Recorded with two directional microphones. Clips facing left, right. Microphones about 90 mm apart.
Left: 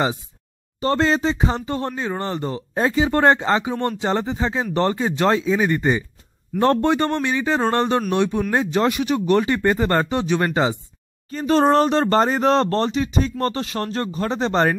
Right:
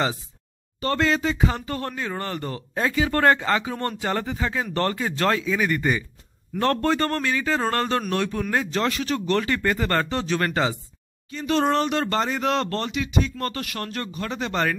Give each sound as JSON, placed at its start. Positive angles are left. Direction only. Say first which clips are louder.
{"t": 0.7, "sound": "speech", "louder": "left 4 dB", "side_deg": 30}
{"t": 11.2, "sound": "speech", "louder": "left 5 dB", "side_deg": 40}